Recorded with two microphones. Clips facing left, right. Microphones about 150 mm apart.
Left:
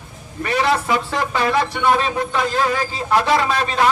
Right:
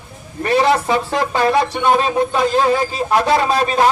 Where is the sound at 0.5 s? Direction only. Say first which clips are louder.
Right 4 dB; 25° right (ahead or behind).